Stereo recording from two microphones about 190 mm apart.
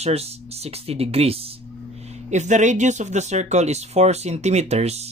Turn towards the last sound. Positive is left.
turn(degrees=-35)  # may be behind; listen again after turning